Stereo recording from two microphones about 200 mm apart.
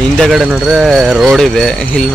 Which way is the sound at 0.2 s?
Centre (ahead or behind).